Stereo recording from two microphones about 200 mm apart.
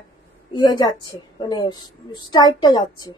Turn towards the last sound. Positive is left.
turn(degrees=20)  # may be behind; listen again after turning